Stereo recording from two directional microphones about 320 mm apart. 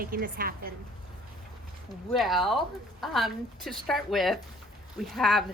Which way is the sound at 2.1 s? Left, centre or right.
Centre.